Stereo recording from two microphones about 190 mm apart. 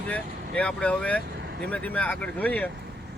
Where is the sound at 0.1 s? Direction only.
5° left (ahead or behind).